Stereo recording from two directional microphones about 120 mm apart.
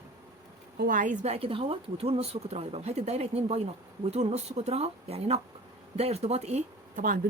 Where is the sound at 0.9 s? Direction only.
90° right.